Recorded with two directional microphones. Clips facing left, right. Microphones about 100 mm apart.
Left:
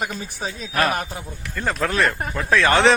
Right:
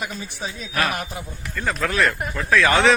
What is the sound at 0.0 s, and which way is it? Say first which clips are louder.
A man's voice: left 2 dB; 40° left (ahead or behind).